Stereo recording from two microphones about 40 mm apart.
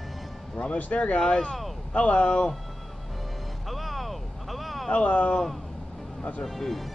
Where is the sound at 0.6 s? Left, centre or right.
Left.